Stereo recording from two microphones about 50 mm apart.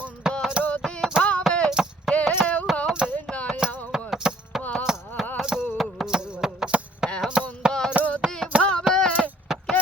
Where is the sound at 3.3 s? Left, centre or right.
Left.